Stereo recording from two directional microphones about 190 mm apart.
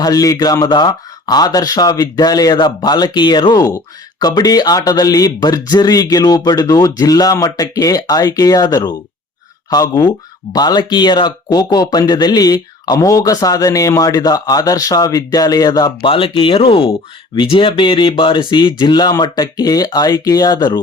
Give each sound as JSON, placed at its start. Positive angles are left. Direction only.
{"t": 0.0, "sound": "speech", "side_deg": 20}